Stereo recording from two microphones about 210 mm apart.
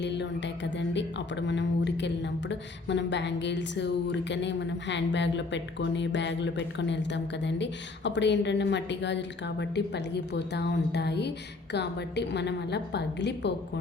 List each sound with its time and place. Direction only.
0.0 s speech: 55° left (ahead or behind)